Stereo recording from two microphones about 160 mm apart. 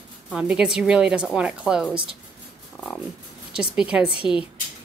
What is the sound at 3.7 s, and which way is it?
Speech, 5° right (ahead or behind).